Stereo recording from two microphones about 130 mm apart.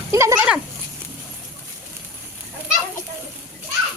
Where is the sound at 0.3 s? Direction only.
10° right (ahead or behind).